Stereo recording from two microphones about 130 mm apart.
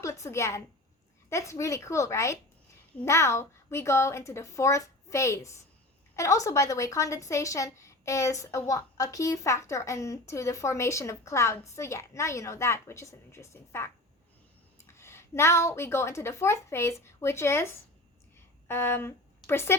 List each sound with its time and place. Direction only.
0.0 s a woman's voice: 25° left (ahead or behind)
14.9 s a woman's voice: 20° left (ahead or behind)
18.3 s a sound: 20° left (ahead or behind)